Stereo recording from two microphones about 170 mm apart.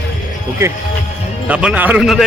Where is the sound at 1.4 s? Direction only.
10° right (ahead or behind).